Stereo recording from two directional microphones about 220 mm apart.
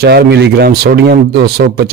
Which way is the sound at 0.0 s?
50° right (ahead or behind).